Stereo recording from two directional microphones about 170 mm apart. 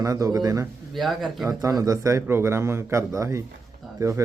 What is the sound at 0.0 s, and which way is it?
Speech, 20° right (ahead or behind).